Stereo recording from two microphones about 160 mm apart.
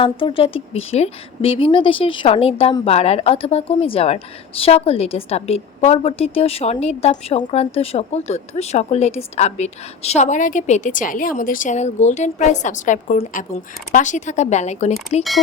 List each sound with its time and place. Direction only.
0.0 s a woman's voice: 35° left (ahead or behind)